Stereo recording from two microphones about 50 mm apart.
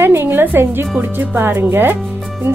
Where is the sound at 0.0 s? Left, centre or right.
Right.